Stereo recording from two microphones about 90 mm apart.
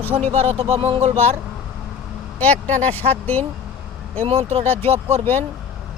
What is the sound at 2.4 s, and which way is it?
Speech, 20° left (ahead or behind).